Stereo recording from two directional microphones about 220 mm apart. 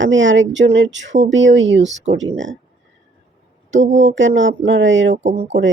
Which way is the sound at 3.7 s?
55° right (ahead or behind).